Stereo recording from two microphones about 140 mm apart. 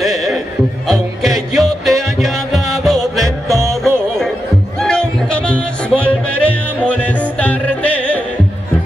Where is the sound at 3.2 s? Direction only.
20° right (ahead or behind).